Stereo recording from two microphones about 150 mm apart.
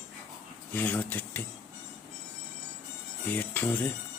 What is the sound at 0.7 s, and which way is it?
Speech, 10° left (ahead or behind).